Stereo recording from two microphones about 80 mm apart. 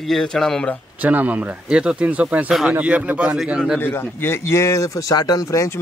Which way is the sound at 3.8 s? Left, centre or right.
Left.